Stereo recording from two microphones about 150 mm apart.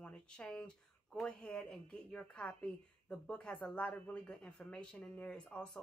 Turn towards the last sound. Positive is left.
turn(degrees=5)  # may be behind; listen again after turning